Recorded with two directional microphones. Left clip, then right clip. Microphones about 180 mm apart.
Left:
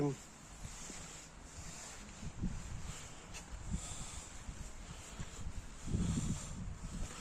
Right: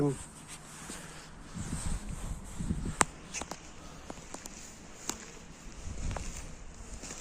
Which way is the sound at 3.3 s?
60° right (ahead or behind).